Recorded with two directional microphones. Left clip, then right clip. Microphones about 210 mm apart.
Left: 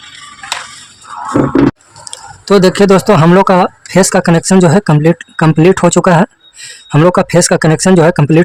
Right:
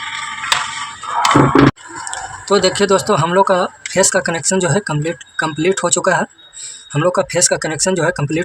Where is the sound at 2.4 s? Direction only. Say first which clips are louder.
Left 6 dB; 55° left (ahead or behind).